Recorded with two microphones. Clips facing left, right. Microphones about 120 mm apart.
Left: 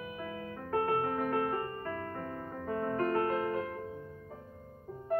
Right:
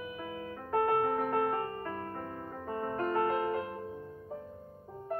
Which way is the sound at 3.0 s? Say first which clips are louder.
Right 2 dB; 20° right (ahead or behind).